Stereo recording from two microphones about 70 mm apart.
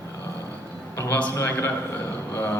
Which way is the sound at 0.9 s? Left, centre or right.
Left.